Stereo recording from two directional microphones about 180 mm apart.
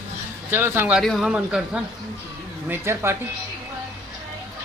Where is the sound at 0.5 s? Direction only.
10° right (ahead or behind).